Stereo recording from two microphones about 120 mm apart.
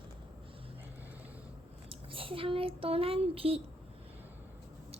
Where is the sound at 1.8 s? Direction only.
50° right (ahead or behind).